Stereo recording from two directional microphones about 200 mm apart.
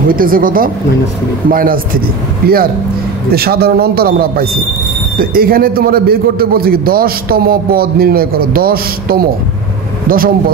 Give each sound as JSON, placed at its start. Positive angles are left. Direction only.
{"t": 0.1, "sound": "a man's voice", "side_deg": -45}